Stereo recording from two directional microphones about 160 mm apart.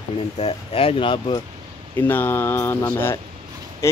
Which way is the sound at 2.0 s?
10° left (ahead or behind).